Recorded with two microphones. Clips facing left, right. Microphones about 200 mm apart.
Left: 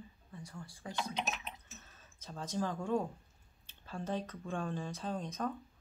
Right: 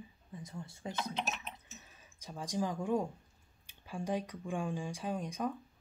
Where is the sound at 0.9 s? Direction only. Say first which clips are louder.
Even; centre (ahead or behind).